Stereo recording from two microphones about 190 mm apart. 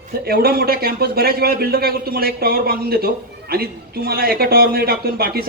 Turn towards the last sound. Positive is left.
turn(degrees=-55)  # may be behind; listen again after turning